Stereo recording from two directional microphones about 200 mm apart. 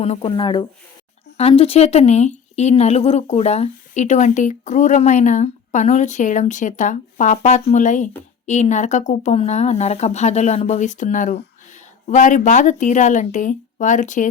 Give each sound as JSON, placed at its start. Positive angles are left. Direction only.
{"t": 0.0, "sound": "speech", "side_deg": 30}